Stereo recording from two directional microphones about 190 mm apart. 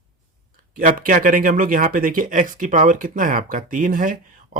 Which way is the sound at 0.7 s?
45° right (ahead or behind).